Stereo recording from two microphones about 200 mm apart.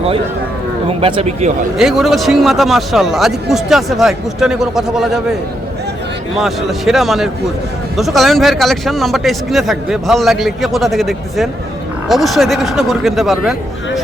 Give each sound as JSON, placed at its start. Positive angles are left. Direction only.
{"t": 0.9, "sound": "speech", "side_deg": -30}
{"t": 1.8, "sound": "a man's voice", "side_deg": 0}
{"t": 6.3, "sound": "a man's voice", "side_deg": 0}